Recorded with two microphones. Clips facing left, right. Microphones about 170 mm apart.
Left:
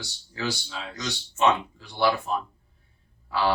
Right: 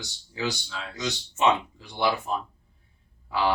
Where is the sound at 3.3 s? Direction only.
15° right (ahead or behind).